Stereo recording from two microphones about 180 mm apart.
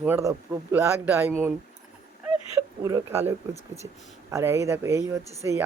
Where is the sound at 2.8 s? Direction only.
15° right (ahead or behind).